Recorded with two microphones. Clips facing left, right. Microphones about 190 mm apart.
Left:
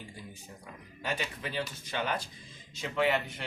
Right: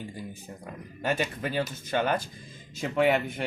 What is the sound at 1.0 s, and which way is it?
Speech, 45° right (ahead or behind).